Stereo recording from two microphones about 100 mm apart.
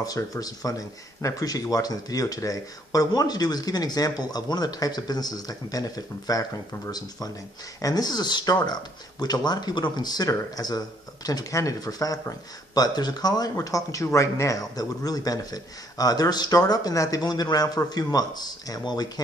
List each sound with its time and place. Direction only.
0.0 s speech: 40° left (ahead or behind)